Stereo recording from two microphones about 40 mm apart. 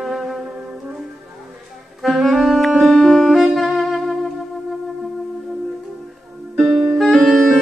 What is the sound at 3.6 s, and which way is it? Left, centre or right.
Saxophone, centre.